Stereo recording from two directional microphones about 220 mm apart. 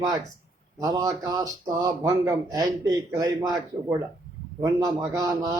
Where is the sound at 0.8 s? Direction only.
15° right (ahead or behind).